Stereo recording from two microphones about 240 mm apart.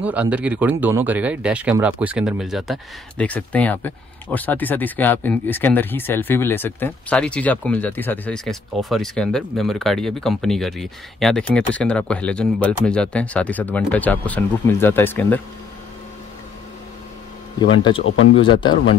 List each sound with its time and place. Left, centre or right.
0.0 s speech: centre
17.6 s speech: centre